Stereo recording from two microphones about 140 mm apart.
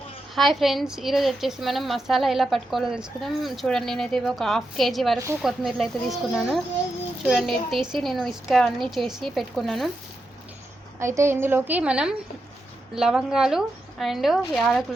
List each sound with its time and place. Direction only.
0.3 s speech: centre (ahead or behind)
11.0 s a woman's voice: 20° right (ahead or behind); by 14.8 s centre (ahead or behind)